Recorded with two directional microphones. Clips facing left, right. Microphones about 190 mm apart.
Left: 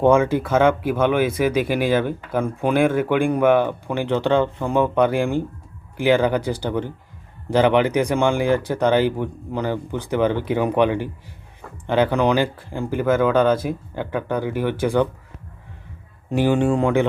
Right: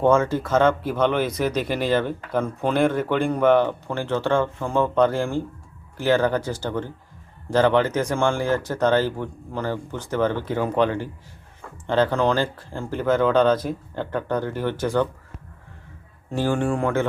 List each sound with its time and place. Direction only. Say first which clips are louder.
0.0 s speech: left 3 dB; 15° left (ahead or behind)
16.3 s speech: left 4 dB; 20° left (ahead or behind)